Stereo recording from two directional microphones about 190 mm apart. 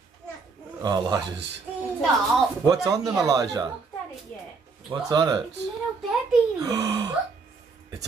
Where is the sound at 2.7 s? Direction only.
20° right (ahead or behind).